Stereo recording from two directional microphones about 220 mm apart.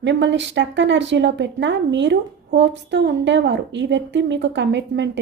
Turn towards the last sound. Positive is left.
turn(degrees=-55)  # may be behind; listen again after turning